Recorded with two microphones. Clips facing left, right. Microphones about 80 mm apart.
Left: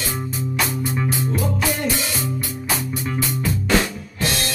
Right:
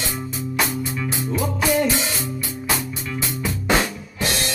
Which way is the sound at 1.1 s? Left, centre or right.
Right.